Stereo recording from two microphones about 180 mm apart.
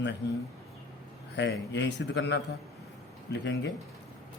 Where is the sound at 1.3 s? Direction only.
80° left.